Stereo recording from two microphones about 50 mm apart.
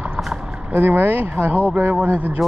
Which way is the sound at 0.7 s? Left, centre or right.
Right.